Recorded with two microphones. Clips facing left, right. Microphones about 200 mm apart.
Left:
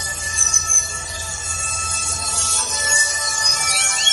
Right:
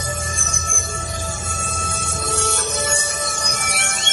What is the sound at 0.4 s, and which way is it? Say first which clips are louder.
Music: right 6 dB; 55° right (ahead or behind).